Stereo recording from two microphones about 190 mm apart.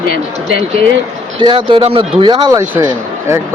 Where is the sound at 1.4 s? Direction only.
25° right (ahead or behind).